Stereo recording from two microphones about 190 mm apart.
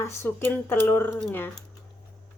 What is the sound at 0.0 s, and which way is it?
A woman's voice, 15° left (ahead or behind).